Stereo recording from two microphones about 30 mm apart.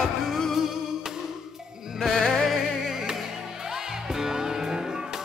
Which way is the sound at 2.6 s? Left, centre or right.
Centre.